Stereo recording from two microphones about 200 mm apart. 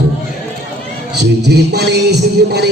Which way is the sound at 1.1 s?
55° right (ahead or behind).